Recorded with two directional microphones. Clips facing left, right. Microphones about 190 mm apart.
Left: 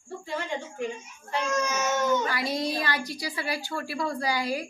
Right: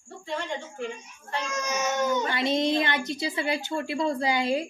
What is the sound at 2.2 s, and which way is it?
A woman's voice, 25° right (ahead or behind).